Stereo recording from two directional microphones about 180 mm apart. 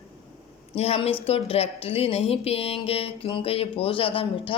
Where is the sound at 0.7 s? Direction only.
35° left (ahead or behind).